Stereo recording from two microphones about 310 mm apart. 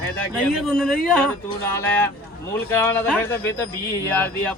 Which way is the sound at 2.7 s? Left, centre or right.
Centre.